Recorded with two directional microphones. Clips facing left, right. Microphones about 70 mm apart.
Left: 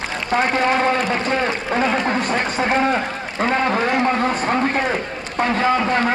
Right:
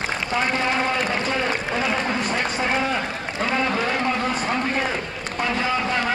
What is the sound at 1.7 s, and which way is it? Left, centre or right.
Run, left.